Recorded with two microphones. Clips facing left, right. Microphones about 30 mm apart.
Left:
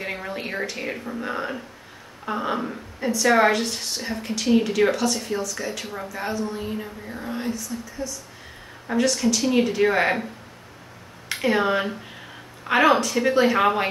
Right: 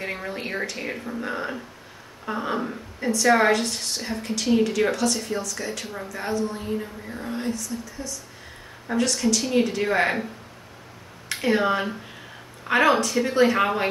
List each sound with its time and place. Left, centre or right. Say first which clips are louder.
0.0 s a woman's voice: even; centre
11.2 s a woman's voice: even; centre